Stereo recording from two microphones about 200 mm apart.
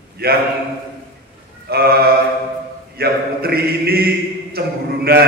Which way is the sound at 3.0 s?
50° right (ahead or behind).